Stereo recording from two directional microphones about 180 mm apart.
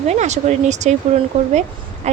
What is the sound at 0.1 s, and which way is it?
A woman's voice, 40° right (ahead or behind).